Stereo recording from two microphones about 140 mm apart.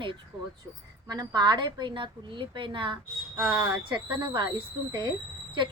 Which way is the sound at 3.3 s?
Centre (ahead or behind).